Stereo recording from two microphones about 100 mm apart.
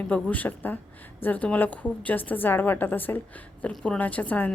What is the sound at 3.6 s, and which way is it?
Speech, 10° left (ahead or behind).